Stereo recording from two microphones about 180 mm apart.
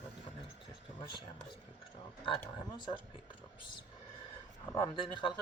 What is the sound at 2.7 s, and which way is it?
Speech, 25° left (ahead or behind).